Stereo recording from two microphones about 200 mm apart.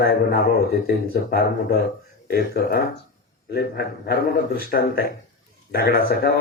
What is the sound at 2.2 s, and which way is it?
Speech, 50° left (ahead or behind).